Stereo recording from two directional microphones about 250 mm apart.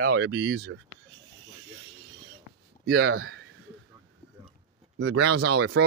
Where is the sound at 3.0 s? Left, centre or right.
Right.